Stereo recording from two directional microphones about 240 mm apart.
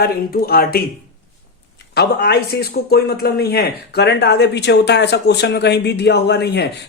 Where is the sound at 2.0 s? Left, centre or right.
Left.